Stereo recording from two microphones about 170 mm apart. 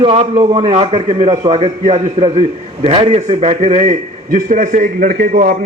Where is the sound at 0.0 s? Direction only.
30° right (ahead or behind).